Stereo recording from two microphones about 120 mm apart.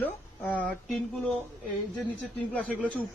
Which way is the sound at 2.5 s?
10° left (ahead or behind).